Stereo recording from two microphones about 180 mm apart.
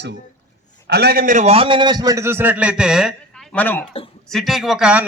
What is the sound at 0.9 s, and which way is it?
A man's voice, 60° right (ahead or behind).